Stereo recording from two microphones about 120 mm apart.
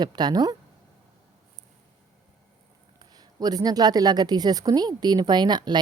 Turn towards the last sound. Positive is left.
turn(degrees=-35)  # may be behind; listen again after turning